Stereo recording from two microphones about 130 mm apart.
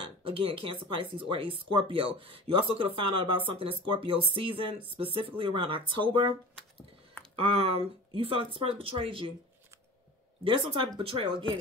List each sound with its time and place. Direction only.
0.0 s speech: 45° right (ahead or behind)
7.3 s speech: 45° right (ahead or behind)
10.4 s speech: 40° right (ahead or behind)